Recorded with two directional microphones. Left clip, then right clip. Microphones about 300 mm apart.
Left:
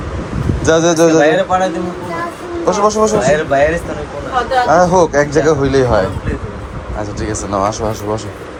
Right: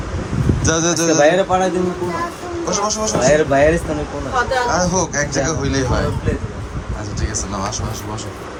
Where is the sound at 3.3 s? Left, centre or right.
Right.